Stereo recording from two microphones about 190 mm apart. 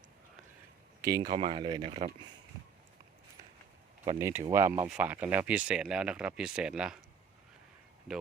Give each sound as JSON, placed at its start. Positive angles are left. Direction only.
{"t": 1.0, "sound": "speech", "side_deg": -15}
{"t": 1.3, "sound": "speech", "side_deg": -30}
{"t": 4.2, "sound": "speech", "side_deg": -10}